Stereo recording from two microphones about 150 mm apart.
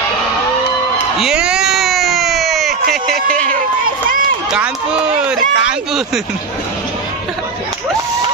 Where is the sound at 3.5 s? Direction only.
65° right (ahead or behind).